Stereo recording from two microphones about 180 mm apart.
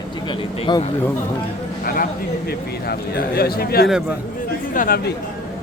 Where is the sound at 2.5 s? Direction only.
60° left (ahead or behind).